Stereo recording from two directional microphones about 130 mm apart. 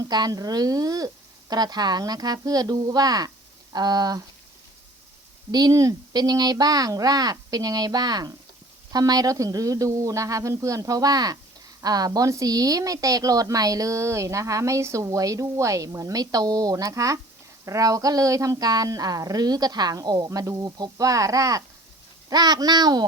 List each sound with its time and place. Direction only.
0.0 s a woman's voice: 30° right (ahead or behind)
5.5 s a woman's voice: 30° right (ahead or behind)